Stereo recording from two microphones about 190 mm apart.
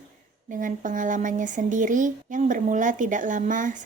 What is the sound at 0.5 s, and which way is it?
Speech, 45° right (ahead or behind).